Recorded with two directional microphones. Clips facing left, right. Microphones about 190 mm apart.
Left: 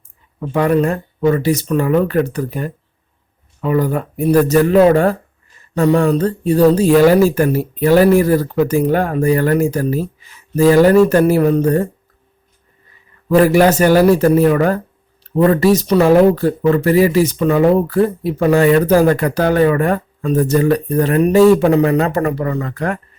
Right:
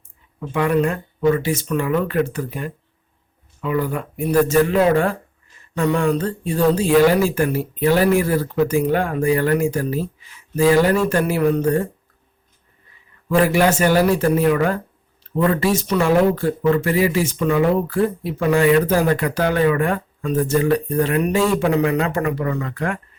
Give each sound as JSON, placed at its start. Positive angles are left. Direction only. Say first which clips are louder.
{"t": 0.3, "sound": "speech", "louder": "left 4 dB", "side_deg": 40}
{"t": 13.2, "sound": "speech", "louder": "left 5 dB", "side_deg": 40}